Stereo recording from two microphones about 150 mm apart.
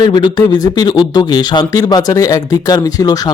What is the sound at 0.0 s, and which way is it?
Speech, 30° left (ahead or behind).